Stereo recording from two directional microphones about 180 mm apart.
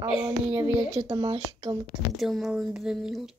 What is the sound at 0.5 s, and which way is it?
Speech, 20° right (ahead or behind).